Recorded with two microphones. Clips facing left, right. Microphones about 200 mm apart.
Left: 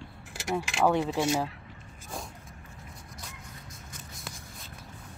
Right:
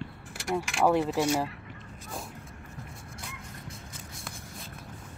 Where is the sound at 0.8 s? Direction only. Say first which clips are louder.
Right 1 dB; centre (ahead or behind).